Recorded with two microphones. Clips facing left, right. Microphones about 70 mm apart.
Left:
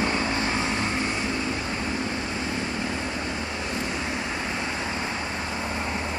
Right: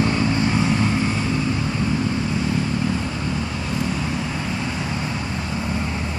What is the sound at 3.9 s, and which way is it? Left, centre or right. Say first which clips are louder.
Vehicle: right 4 dB; centre.